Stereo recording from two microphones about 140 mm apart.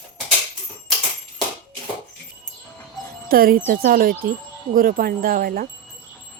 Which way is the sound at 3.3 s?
90° right.